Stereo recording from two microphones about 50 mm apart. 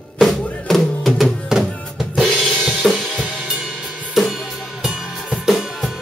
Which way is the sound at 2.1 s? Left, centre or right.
Centre.